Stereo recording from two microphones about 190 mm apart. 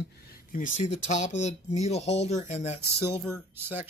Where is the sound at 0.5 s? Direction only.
45° left (ahead or behind).